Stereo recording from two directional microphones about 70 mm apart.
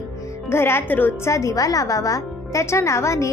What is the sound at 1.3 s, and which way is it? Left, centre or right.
Speech, left.